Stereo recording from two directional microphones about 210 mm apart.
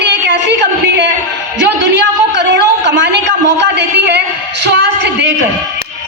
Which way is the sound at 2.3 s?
55° right (ahead or behind).